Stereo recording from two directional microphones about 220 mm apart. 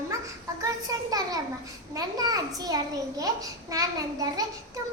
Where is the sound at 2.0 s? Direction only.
15° right (ahead or behind).